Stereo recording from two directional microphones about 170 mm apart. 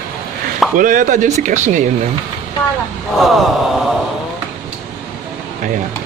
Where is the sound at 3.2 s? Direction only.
Centre (ahead or behind).